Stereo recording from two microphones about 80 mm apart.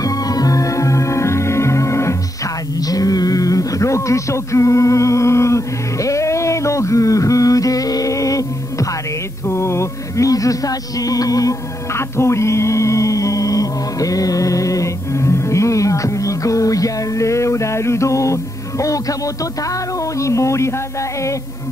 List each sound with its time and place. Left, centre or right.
0.0 s music: left
2.8 s a sound: left
9.5 s music: left
20.2 s speech: left